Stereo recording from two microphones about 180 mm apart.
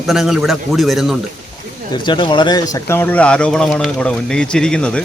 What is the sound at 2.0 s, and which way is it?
Speech, 25° left (ahead or behind).